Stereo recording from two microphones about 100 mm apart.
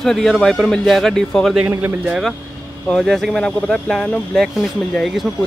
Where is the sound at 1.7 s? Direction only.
25° right (ahead or behind).